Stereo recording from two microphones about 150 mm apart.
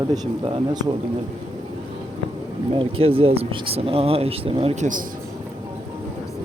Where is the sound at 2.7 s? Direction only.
40° right (ahead or behind); by 5.0 s 55° right (ahead or behind).